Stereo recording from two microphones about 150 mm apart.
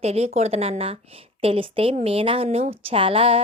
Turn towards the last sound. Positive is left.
turn(degrees=-40)  # may be behind; listen again after turning